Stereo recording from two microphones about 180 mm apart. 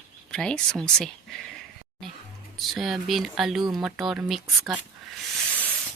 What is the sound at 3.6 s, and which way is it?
Speech, 25° right (ahead or behind).